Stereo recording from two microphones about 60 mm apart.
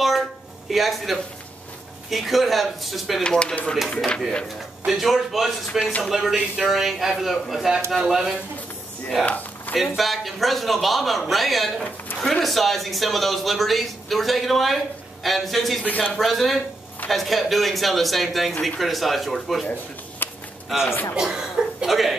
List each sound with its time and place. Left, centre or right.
0.7 s speech: centre
3.3 s speech: centre
4.8 s speech: centre
5.7 s speech: centre
6.0 s speech: centre
9.2 s speech: left
9.8 s speech: centre
15.8 s speech: left
16.1 s speech: centre
20.2 s a sound: left
20.8 s a man's voice: left
21.2 s cough: centre